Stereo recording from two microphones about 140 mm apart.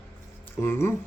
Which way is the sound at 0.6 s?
15° left (ahead or behind).